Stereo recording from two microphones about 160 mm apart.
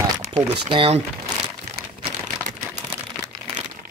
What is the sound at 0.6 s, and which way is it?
Speech, 35° right (ahead or behind).